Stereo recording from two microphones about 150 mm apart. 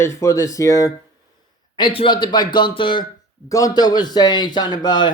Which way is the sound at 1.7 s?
35° left (ahead or behind).